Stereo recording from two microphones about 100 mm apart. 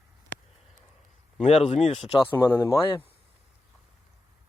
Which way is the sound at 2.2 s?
20° left (ahead or behind).